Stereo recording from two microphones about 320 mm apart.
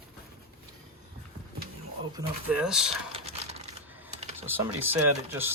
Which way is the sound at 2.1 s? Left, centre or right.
Centre.